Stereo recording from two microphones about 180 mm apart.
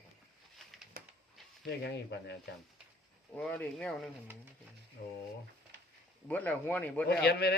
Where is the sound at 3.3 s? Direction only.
5° left (ahead or behind).